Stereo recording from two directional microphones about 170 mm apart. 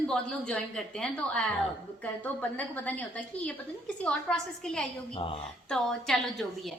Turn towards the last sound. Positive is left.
turn(degrees=0)  # may be behind; listen again after turning